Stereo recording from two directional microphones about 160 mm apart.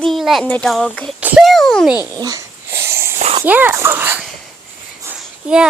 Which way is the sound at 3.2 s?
40° right (ahead or behind).